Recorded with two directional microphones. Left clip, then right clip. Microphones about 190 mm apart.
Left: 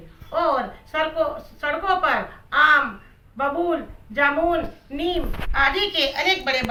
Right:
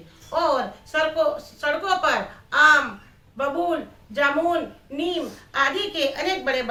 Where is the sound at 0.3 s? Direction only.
15° right (ahead or behind).